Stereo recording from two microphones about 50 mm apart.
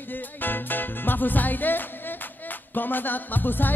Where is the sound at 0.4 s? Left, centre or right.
Left.